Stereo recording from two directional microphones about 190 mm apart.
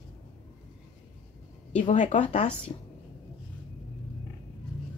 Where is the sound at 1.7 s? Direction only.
40° left (ahead or behind).